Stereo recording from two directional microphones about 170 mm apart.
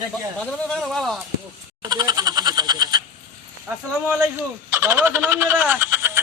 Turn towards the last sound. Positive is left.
turn(degrees=-15)  # may be behind; listen again after turning